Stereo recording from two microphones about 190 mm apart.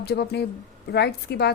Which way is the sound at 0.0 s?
55° left (ahead or behind).